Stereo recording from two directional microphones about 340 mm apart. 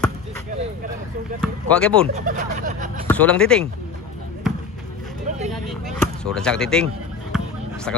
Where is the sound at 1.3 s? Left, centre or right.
Centre.